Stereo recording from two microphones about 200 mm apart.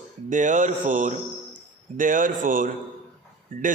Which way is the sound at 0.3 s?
40° right (ahead or behind).